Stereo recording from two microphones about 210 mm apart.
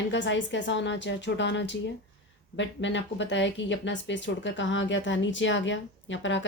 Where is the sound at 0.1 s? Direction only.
60° left (ahead or behind).